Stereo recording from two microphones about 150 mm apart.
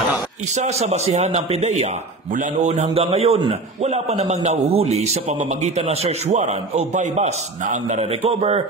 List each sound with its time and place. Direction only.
0.6 s a man's voice: 50° right (ahead or behind)